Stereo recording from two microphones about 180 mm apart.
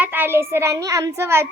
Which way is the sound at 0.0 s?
10° right (ahead or behind).